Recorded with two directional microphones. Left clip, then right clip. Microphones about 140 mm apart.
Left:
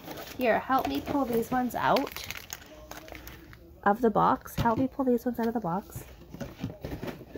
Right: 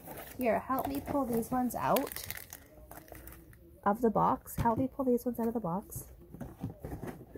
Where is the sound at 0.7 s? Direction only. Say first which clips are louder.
Left 6 dB; 15° right (ahead or behind); by 2.3 s 45° right (ahead or behind).